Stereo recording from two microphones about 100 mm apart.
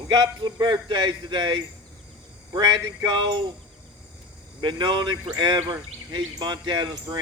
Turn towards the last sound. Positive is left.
turn(degrees=-45)  # may be behind; listen again after turning